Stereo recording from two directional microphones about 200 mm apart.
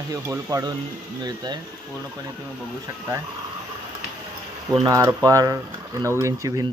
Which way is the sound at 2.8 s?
15° right (ahead or behind).